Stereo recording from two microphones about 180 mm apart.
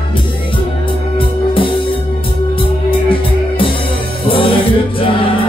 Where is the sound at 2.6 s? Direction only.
30° left (ahead or behind).